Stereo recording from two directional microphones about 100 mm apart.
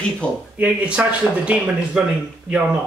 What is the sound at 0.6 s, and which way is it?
Speech, 10° right (ahead or behind).